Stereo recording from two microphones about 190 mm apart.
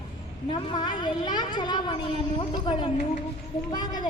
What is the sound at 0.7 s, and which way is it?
A woman's voice, 25° left (ahead or behind).